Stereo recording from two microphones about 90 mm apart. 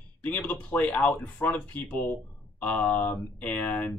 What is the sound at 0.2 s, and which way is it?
Speech, 15° left (ahead or behind).